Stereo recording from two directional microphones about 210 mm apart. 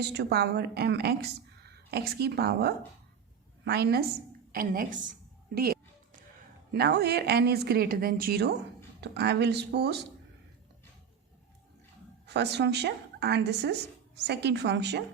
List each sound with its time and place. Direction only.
0.0 s a woman's voice: 50° right (ahead or behind)
6.7 s a woman's voice: 50° right (ahead or behind)
12.2 s a woman's voice: 55° right (ahead or behind)